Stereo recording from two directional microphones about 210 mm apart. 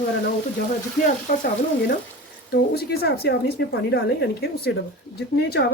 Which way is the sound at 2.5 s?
50° left (ahead or behind).